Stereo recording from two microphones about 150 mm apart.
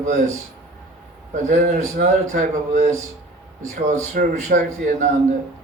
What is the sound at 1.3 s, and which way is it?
A man's voice, 60° right (ahead or behind).